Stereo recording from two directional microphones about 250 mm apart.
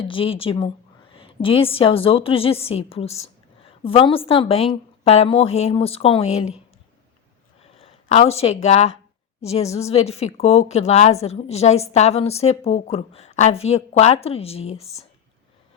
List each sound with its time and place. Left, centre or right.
0.0 s a woman's voice: left
7.8 s a woman's voice: left